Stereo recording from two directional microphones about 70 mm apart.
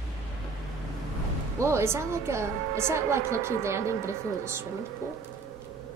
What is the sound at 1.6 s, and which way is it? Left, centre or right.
A woman's voice, right.